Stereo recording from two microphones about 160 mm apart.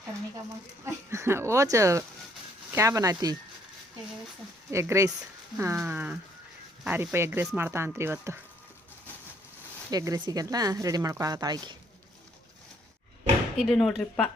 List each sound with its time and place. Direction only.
1.1 s speech: 15° right (ahead or behind)
4.7 s speech: 15° right (ahead or behind)
9.9 s speech: 20° right (ahead or behind)
13.6 s speech: centre (ahead or behind)